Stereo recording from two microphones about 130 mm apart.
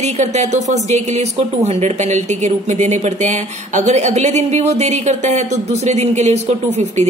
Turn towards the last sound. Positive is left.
turn(degrees=-55)  # may be behind; listen again after turning